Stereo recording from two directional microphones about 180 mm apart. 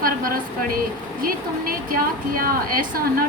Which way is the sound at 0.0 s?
55° right (ahead or behind).